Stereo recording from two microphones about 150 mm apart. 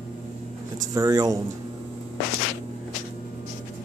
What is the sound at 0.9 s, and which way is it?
Speech, 25° right (ahead or behind).